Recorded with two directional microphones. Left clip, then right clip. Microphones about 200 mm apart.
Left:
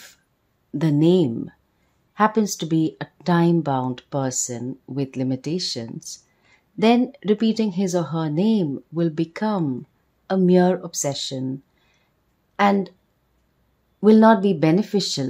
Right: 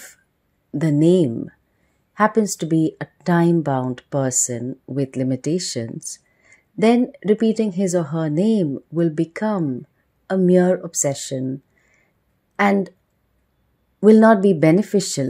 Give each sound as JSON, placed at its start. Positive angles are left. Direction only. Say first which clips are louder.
{"t": 0.7, "sound": "speech", "louder": "right 2 dB", "side_deg": -10}
{"t": 12.5, "sound": "speech", "louder": "right 1 dB", "side_deg": -15}
{"t": 13.9, "sound": "speech", "louder": "right 2 dB", "side_deg": -15}